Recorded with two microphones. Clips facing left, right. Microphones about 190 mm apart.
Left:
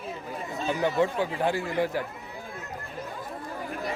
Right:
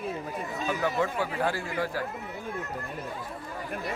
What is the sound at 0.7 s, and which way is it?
Speech, 20° left (ahead or behind).